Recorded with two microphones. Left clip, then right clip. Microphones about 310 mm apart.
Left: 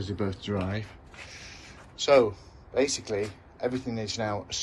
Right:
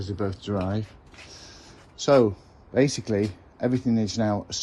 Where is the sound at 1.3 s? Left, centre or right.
Centre.